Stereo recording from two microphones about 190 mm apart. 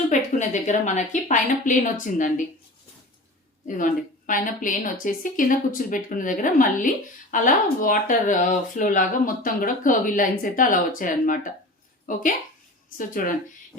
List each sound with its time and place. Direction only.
0.1 s a woman's voice: 40° left (ahead or behind)
3.7 s a woman's voice: 45° left (ahead or behind)
13.0 s a woman's voice: 45° left (ahead or behind)